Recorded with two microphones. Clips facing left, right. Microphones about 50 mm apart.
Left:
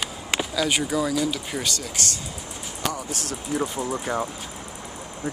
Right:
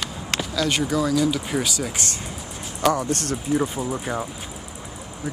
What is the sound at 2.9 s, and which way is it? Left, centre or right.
Speech, right.